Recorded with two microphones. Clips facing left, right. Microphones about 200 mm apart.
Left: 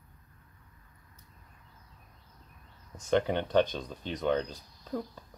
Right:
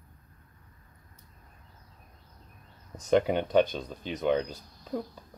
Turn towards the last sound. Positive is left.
turn(degrees=-10)  # may be behind; listen again after turning